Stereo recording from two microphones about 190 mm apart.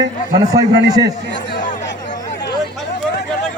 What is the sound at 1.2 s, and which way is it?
Speech, 70° left (ahead or behind).